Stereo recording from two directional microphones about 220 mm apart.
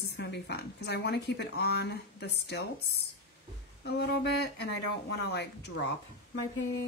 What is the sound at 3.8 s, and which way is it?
A woman's voice, 45° left (ahead or behind).